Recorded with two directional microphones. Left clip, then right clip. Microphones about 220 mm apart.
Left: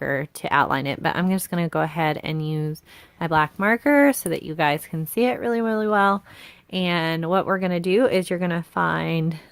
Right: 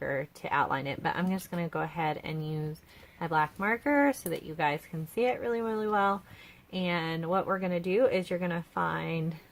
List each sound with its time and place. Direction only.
0.0 s speech: 40° left (ahead or behind)